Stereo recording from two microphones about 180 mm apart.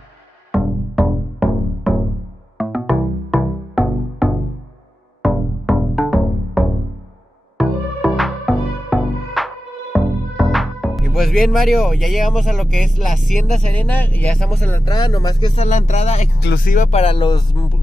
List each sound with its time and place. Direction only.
0.5 s music: centre (ahead or behind)
14.9 s speech: 25° left (ahead or behind)
16.3 s speech: 60° left (ahead or behind); by 17.7 s 25° left (ahead or behind)